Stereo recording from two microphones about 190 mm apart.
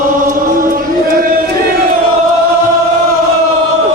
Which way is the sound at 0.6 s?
50° right (ahead or behind).